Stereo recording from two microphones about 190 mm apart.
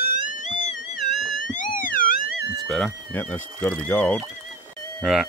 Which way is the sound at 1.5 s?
45° left (ahead or behind).